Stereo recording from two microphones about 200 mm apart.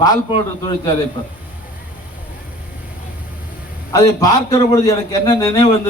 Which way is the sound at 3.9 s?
20° left (ahead or behind).